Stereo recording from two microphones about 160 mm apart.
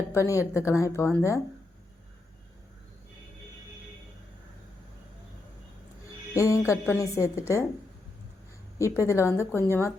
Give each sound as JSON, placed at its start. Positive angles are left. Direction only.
{"t": 0.1, "sound": "a woman's voice", "side_deg": 20}
{"t": 6.3, "sound": "a woman's voice", "side_deg": 20}
{"t": 8.8, "sound": "a woman's voice", "side_deg": 15}